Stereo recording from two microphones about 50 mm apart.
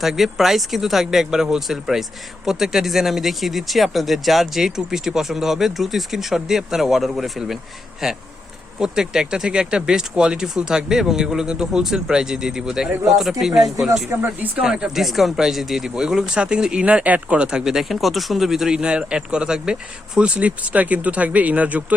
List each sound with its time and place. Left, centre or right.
0.0 s speech: centre
14.3 s speech: centre
14.9 s speech: centre
16.8 s speech: right